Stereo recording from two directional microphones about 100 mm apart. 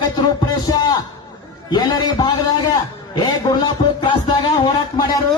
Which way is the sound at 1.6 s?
45° left (ahead or behind).